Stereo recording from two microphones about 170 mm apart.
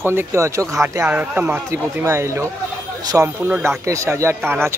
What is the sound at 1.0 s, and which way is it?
Speech, 10° right (ahead or behind).